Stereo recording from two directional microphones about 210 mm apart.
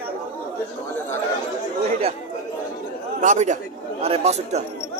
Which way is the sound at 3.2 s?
35° right (ahead or behind).